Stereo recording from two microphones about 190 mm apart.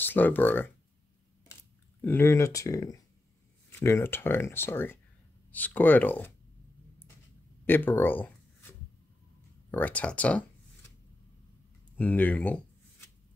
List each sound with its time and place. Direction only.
0.0 s speech: 10° left (ahead or behind)
2.0 s speech: 10° left (ahead or behind)
7.6 s a sound: 10° left (ahead or behind)
9.7 s speech: 10° left (ahead or behind)
12.0 s speech: 10° left (ahead or behind)